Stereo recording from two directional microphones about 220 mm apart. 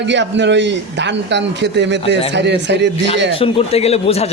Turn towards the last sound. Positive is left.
turn(degrees=30)  # may be behind; listen again after turning